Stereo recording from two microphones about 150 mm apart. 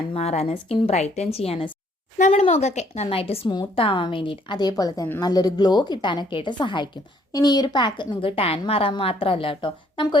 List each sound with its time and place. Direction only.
0.1 s a woman's voice: 45° left (ahead or behind)